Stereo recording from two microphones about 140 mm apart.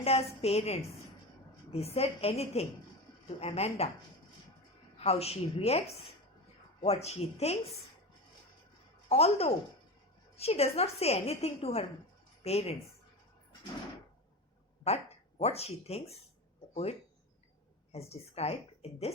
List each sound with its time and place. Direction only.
0.0 s a woman's voice: 45° left (ahead or behind)
4.9 s a woman's voice: 45° left (ahead or behind)
6.8 s a woman's voice: 45° left (ahead or behind)
9.0 s a woman's voice: 45° left (ahead or behind)
14.9 s a woman's voice: 50° left (ahead or behind)
17.9 s a woman's voice: 50° left (ahead or behind)